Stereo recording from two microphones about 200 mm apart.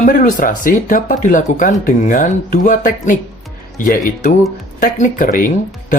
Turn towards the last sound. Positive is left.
turn(degrees=40)  # may be behind; listen again after turning